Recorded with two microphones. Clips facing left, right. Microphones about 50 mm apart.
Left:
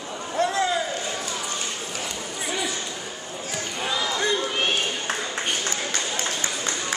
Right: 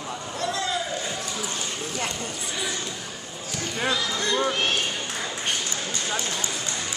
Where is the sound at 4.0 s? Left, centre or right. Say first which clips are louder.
Left 1 dB; centre.